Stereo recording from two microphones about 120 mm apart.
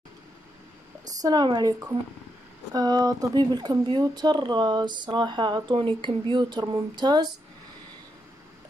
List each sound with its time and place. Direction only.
1.2 s speech: 35° right (ahead or behind)